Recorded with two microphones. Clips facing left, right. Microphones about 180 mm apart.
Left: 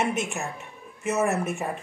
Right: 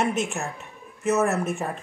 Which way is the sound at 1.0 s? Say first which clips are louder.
Right 3 dB; 10° left (ahead or behind).